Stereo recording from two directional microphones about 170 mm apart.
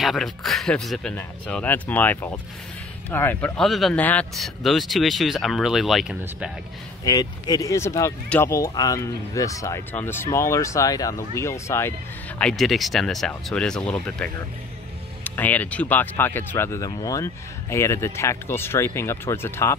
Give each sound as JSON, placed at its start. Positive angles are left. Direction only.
{"t": 0.0, "sound": "speech", "side_deg": 0}
{"t": 7.1, "sound": "speech", "side_deg": 20}
{"t": 12.4, "sound": "speech", "side_deg": 5}